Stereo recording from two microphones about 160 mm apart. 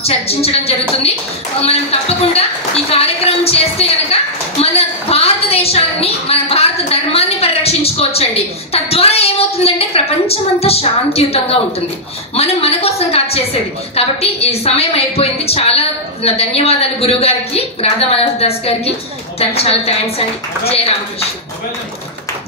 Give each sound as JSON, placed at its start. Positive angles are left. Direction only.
{"t": 0.0, "sound": "a woman's voice", "side_deg": 40}
{"t": 6.9, "sound": "a sound", "side_deg": 40}
{"t": 12.4, "sound": "a woman's voice", "side_deg": 40}